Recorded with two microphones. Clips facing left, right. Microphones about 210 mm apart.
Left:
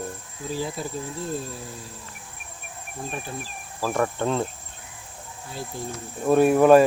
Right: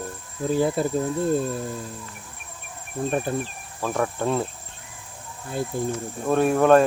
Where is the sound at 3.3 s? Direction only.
55° right (ahead or behind).